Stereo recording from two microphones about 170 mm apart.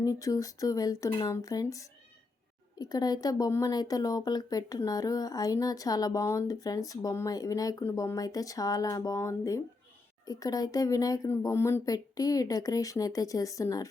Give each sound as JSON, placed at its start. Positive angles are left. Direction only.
{"t": 0.0, "sound": "speech", "side_deg": 20}